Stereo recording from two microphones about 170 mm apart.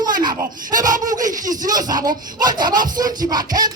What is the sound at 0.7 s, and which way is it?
Speech, 50° right (ahead or behind).